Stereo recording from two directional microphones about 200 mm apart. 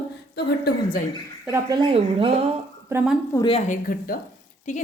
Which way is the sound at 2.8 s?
5° right (ahead or behind).